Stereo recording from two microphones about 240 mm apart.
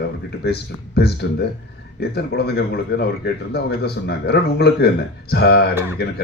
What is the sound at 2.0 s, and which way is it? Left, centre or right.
Speech, left.